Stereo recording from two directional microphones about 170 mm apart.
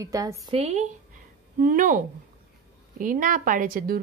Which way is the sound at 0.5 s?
40° right (ahead or behind).